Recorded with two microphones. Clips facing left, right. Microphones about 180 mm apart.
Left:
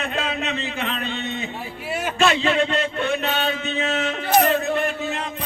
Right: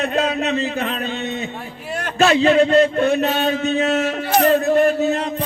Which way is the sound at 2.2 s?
40° right (ahead or behind).